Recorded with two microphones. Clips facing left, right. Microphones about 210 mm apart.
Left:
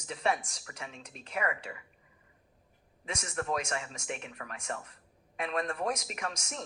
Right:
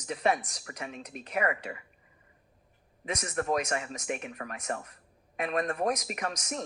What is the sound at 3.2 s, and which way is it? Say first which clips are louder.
Speech: right 4 dB; 40° right (ahead or behind).